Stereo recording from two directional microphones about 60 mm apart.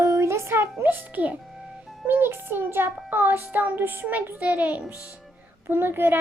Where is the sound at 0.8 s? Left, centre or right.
Right.